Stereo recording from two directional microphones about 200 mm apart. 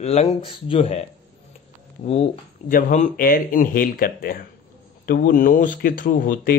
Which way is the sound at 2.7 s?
40° left (ahead or behind).